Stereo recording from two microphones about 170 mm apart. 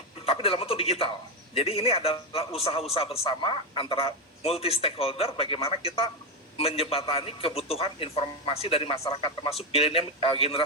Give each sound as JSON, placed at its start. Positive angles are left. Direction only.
{"t": 0.3, "sound": "speech", "side_deg": 35}